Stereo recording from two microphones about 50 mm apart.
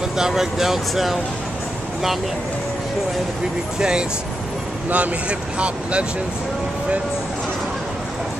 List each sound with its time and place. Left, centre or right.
0.2 s speech: centre
4.8 s speech: right